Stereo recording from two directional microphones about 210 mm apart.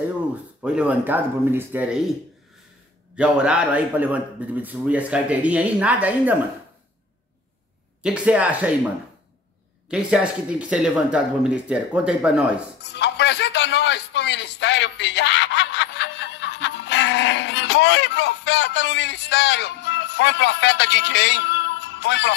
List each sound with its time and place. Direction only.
0.6 s a man's voice: 5° right (ahead or behind)
3.2 s a man's voice: 5° right (ahead or behind)
8.0 s speech: 5° right (ahead or behind)
9.8 s speech: 5° right (ahead or behind)
12.8 s a sound: 55° left (ahead or behind)